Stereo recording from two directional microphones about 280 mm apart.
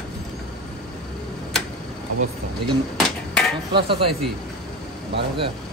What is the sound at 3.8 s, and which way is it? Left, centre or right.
Speech, centre.